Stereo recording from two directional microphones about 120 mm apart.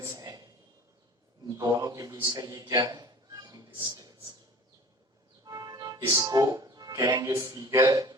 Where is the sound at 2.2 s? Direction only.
30° right (ahead or behind).